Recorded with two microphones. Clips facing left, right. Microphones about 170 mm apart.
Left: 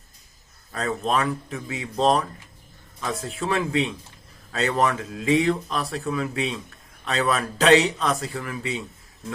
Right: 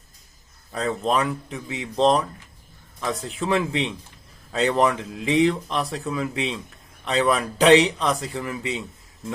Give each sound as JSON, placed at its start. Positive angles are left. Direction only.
{"t": 0.7, "sound": "speech", "side_deg": -15}
{"t": 3.3, "sound": "a man's voice", "side_deg": -20}